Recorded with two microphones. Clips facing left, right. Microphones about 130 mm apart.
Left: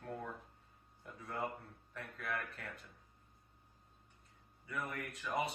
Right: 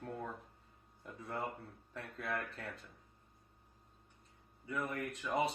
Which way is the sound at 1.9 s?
30° right (ahead or behind).